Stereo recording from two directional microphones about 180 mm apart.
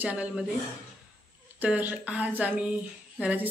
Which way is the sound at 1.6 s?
10° right (ahead or behind).